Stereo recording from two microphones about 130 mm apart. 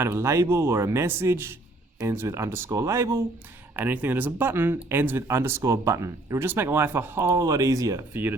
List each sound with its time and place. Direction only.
0.0 s speech: 20° right (ahead or behind)